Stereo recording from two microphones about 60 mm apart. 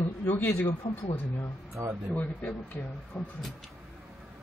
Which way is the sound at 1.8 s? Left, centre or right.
Right.